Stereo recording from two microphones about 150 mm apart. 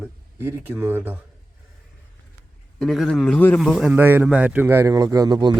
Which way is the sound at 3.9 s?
15° right (ahead or behind).